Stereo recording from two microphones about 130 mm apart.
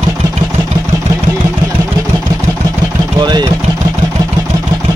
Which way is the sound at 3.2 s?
35° right (ahead or behind).